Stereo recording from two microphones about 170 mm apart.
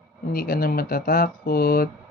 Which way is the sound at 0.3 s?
60° left (ahead or behind).